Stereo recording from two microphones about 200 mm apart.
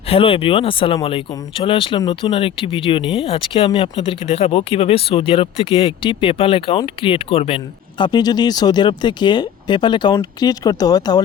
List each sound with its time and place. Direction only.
0.1 s speech: 25° left (ahead or behind)